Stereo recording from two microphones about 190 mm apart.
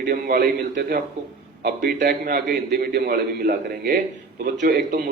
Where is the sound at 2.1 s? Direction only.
50° right (ahead or behind).